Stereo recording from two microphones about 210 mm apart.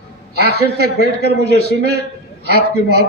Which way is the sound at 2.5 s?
50° right (ahead or behind).